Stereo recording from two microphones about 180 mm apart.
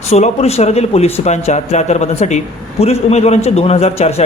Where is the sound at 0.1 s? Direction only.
35° left (ahead or behind).